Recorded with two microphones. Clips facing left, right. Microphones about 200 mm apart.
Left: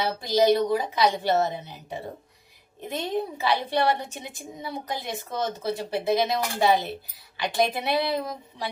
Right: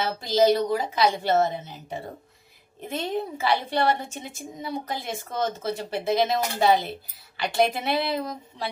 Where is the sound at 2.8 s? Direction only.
15° left (ahead or behind).